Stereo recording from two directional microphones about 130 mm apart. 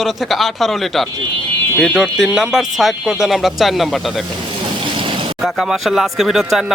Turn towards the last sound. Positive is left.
turn(degrees=0)  # may be behind; listen again after turning